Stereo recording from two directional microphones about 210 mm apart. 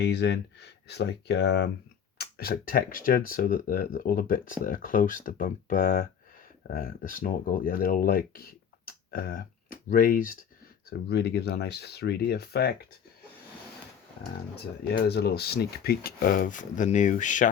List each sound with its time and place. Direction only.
0.0 s speech: 55° left (ahead or behind)
10.8 s speech: 55° left (ahead or behind)
14.8 s speech: 50° left (ahead or behind)